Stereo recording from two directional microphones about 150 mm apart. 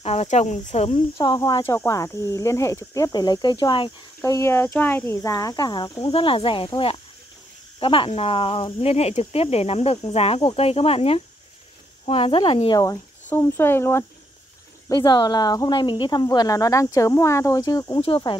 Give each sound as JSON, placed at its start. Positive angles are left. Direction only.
{"t": 0.0, "sound": "speech", "side_deg": 45}
{"t": 1.1, "sound": "speech", "side_deg": 25}
{"t": 4.2, "sound": "speech", "side_deg": 15}
{"t": 6.1, "sound": "speech", "side_deg": 35}
{"t": 12.8, "sound": "speech", "side_deg": 20}
{"t": 14.9, "sound": "speech", "side_deg": 25}